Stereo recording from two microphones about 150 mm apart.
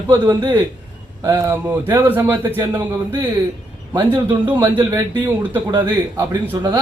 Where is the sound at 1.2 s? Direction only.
15° right (ahead or behind).